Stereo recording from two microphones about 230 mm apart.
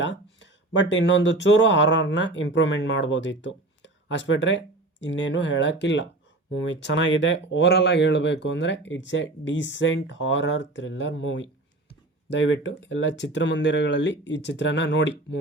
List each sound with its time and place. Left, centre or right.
0.8 s speech: left